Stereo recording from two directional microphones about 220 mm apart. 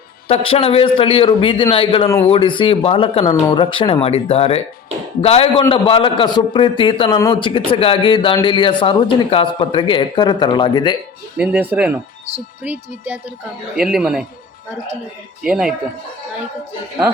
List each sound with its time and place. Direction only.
0.3 s a man's voice: 25° left (ahead or behind)
11.3 s a man's voice: 5° right (ahead or behind)
15.4 s a man's voice: 5° right (ahead or behind)